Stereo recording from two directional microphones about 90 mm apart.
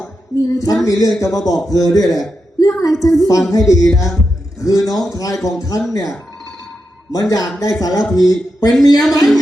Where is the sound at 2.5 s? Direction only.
40° left (ahead or behind).